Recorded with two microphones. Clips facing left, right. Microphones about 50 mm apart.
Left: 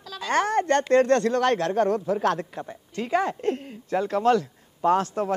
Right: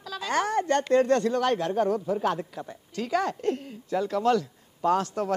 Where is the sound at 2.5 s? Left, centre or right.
Left.